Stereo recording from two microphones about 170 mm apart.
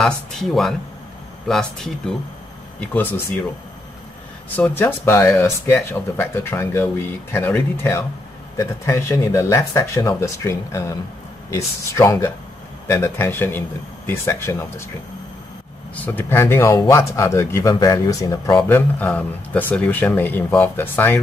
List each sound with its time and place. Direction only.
0.0 s speech: centre (ahead or behind)
4.6 s speech: 10° left (ahead or behind)
16.0 s speech: 10° left (ahead or behind)